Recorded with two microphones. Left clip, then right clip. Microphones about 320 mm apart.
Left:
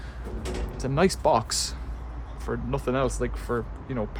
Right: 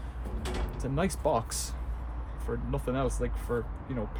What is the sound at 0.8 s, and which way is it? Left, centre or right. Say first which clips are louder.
Speech: left 9 dB; left.